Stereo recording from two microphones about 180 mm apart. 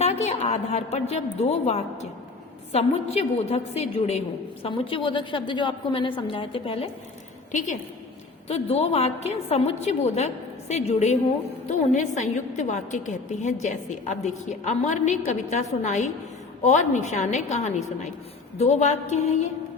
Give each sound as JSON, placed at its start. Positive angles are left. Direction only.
{"t": 0.0, "sound": "a woman's voice", "side_deg": 35}
{"t": 8.4, "sound": "a woman's voice", "side_deg": 35}